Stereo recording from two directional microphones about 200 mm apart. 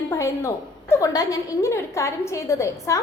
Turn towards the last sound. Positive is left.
turn(degrees=15)  # may be behind; listen again after turning